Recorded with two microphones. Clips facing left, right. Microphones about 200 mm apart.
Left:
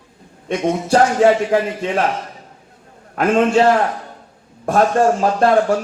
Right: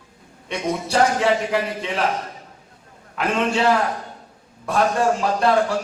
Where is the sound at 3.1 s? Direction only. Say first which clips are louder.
Left 7 dB; 50° left (ahead or behind).